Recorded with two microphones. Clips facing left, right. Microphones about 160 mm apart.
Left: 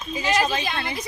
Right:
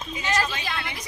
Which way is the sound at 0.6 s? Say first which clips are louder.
Left 4 dB; 30° left (ahead or behind).